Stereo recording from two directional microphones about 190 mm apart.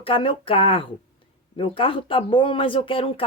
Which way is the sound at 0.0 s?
30° left (ahead or behind).